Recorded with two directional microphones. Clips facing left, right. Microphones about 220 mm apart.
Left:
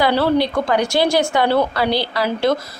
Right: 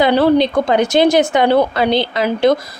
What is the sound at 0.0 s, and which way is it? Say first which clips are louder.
Speech: right 4 dB; 20° right (ahead or behind).